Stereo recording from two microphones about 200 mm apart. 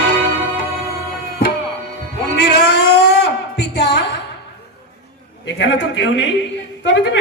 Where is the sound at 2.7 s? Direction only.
55° left (ahead or behind).